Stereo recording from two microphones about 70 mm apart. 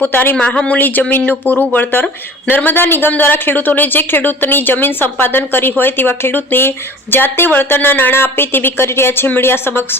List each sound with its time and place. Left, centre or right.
0.0 s speech: left
0.3 s speech: centre
0.8 s speech: left